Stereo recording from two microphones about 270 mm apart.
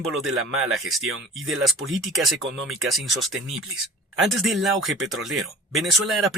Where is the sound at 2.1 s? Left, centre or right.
Centre.